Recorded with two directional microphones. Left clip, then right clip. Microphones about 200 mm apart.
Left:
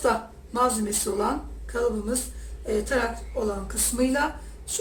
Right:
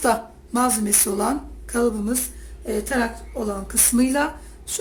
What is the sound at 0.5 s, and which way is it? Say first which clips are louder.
Speech: right 2 dB; 50° right (ahead or behind).